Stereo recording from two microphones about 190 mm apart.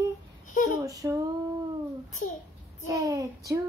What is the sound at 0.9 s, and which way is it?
Child singing, 20° right (ahead or behind).